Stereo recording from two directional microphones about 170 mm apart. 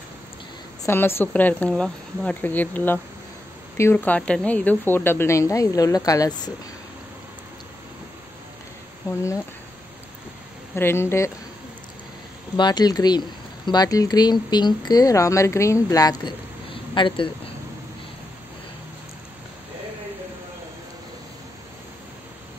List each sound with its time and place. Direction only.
0.8 s speech: 15° left (ahead or behind)
10.7 s speech: 15° left (ahead or behind)
12.5 s speech: 25° left (ahead or behind)